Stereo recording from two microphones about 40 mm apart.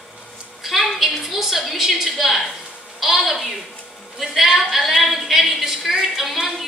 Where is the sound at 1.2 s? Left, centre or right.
Centre.